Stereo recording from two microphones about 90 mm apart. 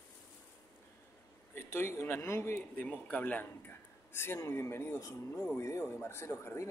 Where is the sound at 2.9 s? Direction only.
15° left (ahead or behind).